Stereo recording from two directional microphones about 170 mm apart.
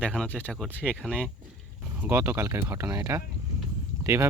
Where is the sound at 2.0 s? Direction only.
10° right (ahead or behind).